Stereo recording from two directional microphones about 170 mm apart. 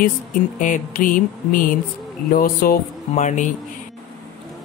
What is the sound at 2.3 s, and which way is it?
Speech, 60° left (ahead or behind).